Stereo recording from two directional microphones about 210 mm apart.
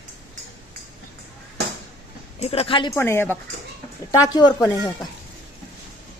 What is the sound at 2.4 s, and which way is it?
Speech, 30° left (ahead or behind).